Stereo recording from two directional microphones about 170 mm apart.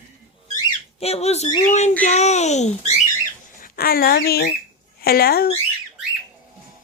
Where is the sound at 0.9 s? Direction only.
40° left (ahead or behind).